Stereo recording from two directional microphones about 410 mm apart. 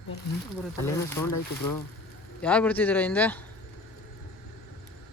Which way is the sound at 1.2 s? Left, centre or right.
Left.